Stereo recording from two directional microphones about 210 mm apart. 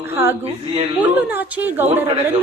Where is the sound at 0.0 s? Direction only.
10° right (ahead or behind).